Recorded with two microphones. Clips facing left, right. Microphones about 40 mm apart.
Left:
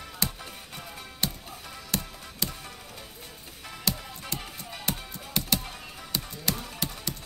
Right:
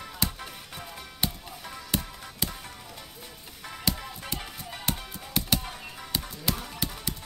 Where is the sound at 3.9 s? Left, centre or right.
Centre.